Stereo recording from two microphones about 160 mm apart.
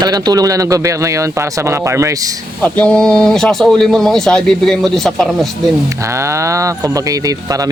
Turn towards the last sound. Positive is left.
turn(degrees=-20)  # may be behind; listen again after turning